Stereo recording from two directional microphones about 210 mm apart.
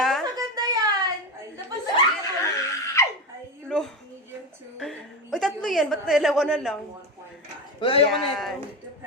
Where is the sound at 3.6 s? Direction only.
5° left (ahead or behind).